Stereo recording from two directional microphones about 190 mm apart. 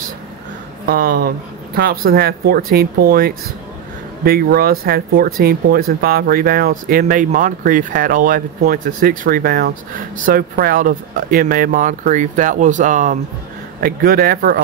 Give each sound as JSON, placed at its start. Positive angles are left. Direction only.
{"t": 0.8, "sound": "speech", "side_deg": -50}